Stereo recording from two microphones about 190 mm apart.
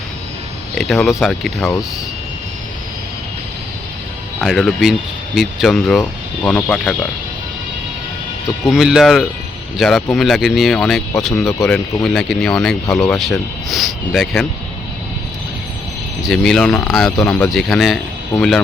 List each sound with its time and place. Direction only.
0.8 s speech: centre (ahead or behind)
4.4 s speech: centre (ahead or behind)
8.6 s speech: centre (ahead or behind)
16.2 s speech: centre (ahead or behind)